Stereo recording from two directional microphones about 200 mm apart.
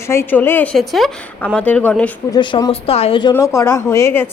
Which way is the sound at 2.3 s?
25° left (ahead or behind).